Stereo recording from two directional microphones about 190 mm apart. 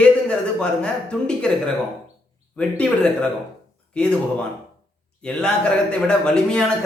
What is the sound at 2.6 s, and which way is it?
Speech, 5° left (ahead or behind).